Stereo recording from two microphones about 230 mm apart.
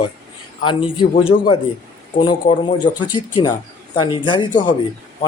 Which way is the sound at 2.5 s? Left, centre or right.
Left.